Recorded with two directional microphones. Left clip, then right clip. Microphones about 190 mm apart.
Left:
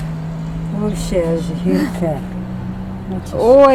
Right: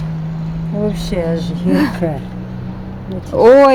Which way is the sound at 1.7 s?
45° right (ahead or behind).